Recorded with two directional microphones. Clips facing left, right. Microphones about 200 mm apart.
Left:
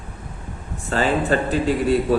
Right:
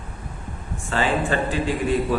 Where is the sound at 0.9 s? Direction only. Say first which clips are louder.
Left 3 dB; 40° left (ahead or behind).